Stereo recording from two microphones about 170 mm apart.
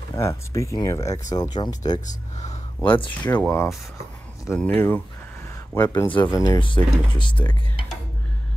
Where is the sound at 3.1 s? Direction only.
10° left (ahead or behind).